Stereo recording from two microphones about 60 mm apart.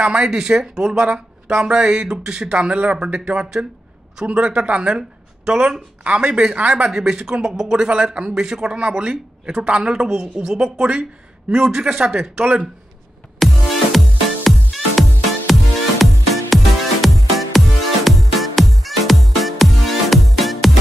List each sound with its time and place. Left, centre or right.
0.0 s speech: centre
13.4 s music: centre
17.0 s music: centre